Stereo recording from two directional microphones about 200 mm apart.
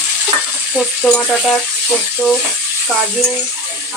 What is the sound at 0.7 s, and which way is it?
Speech, 5° left (ahead or behind).